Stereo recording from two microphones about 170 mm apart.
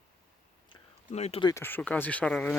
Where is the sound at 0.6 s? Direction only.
40° left (ahead or behind).